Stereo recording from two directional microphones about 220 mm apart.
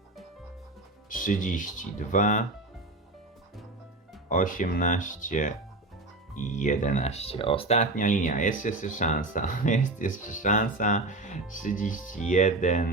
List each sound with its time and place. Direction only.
1.1 s speech: 35° left (ahead or behind)
4.3 s speech: 35° left (ahead or behind)